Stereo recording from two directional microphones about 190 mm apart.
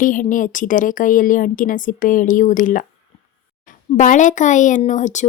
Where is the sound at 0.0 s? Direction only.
45° left (ahead or behind).